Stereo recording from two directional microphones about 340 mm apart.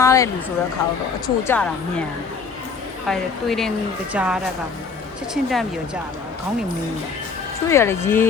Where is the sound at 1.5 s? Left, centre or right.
Centre.